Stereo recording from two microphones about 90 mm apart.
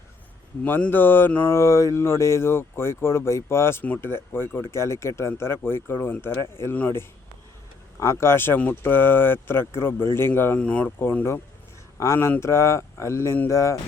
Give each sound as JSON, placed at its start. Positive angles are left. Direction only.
{"t": 0.6, "sound": "speech", "side_deg": 20}
{"t": 1.5, "sound": "speech", "side_deg": 30}
{"t": 7.9, "sound": "speech", "side_deg": 30}
{"t": 10.6, "sound": "speech", "side_deg": 15}
{"t": 13.5, "sound": "speech", "side_deg": 35}